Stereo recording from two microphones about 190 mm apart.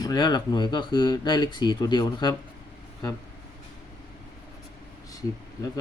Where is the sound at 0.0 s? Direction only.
20° left (ahead or behind).